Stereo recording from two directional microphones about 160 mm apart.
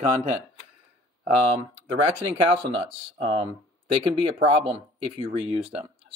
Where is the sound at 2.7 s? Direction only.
35° right (ahead or behind).